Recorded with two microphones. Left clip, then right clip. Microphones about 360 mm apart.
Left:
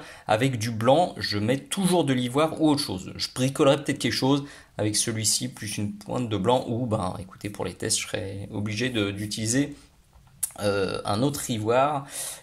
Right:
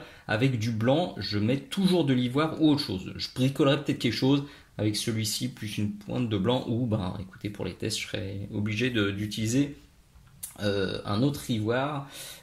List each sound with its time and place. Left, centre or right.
0.3 s speech: centre